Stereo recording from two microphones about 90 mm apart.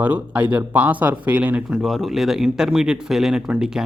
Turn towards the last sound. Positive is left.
turn(degrees=-5)  # may be behind; listen again after turning